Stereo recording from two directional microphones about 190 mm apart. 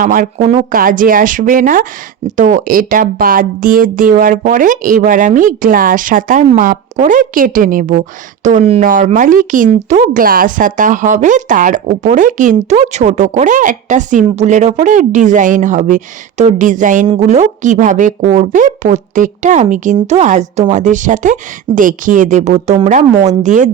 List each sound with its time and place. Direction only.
0.0 s speech: 45° right (ahead or behind)
0.7 s a woman's voice: 45° right (ahead or behind)
8.4 s a woman's voice: 35° right (ahead or behind)